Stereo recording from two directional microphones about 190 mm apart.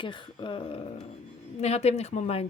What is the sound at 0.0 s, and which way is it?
Speech, 25° left (ahead or behind).